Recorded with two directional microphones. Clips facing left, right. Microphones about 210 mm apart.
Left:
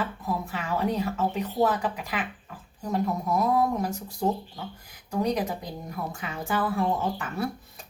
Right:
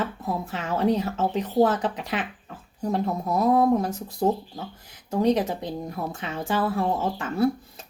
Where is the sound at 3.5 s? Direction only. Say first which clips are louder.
Right 8 dB; 30° right (ahead or behind).